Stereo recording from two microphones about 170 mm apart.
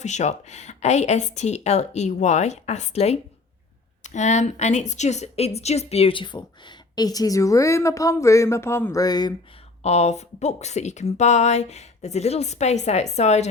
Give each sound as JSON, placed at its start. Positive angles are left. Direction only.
{"t": 0.0, "sound": "a woman's voice", "side_deg": 45}
{"t": 9.8, "sound": "speech", "side_deg": 40}